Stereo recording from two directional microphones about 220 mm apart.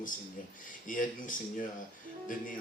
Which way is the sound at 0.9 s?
35° left (ahead or behind).